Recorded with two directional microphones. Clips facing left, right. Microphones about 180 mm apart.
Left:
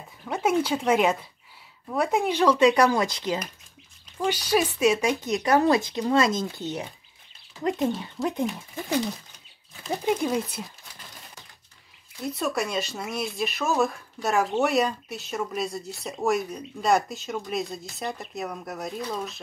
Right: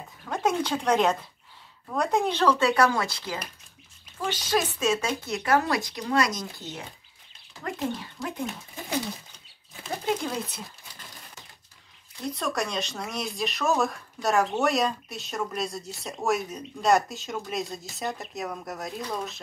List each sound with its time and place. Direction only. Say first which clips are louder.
0.2 s speech: left 2 dB; 10° left (ahead or behind)
12.3 s speech: left 2 dB; 5° left (ahead or behind)